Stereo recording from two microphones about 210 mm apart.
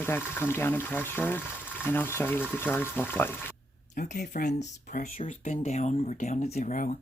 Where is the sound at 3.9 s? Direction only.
35° left (ahead or behind).